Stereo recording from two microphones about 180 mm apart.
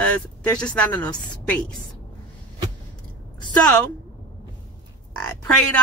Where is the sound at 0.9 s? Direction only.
25° left (ahead or behind).